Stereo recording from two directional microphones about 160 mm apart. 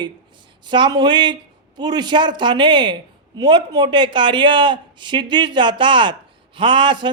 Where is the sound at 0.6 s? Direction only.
30° right (ahead or behind).